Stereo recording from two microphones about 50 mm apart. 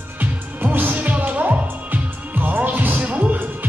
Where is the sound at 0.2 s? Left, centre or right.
Right.